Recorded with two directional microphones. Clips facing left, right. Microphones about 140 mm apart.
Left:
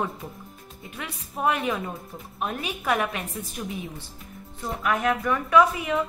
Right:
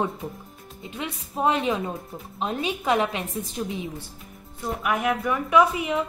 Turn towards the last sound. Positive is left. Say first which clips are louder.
# even
turn(degrees=-20)  # may be behind; listen again after turning